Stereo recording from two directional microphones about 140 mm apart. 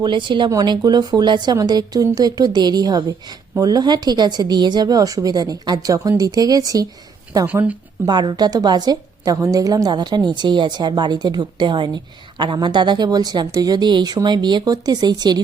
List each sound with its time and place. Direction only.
0.0 s a woman's voice: 35° right (ahead or behind)
7.4 s speech: 10° right (ahead or behind)
8.0 s a woman's voice: 30° right (ahead or behind)